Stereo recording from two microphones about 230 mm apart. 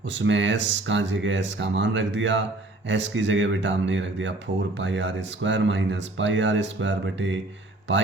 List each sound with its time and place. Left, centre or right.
0.1 s speech: right